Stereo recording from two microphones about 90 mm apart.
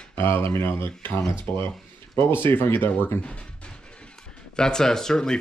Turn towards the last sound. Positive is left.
turn(degrees=5)  # may be behind; listen again after turning